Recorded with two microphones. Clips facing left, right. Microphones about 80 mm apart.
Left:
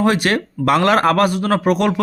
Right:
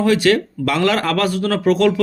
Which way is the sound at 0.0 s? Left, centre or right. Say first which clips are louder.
Right 2 dB; left.